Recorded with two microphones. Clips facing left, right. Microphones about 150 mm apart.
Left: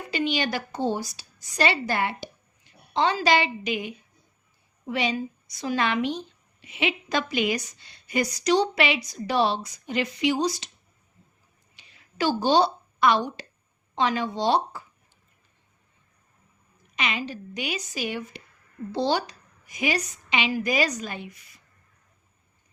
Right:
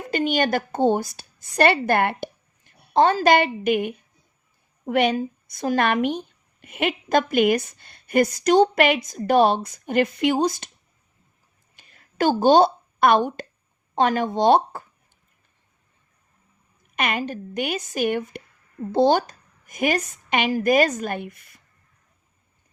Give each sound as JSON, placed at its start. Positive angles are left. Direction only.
{"t": 0.1, "sound": "a woman's voice", "side_deg": -50}
{"t": 11.8, "sound": "a sound", "side_deg": -50}
{"t": 13.9, "sound": "a woman's voice", "side_deg": -50}
{"t": 16.9, "sound": "a woman's voice", "side_deg": -55}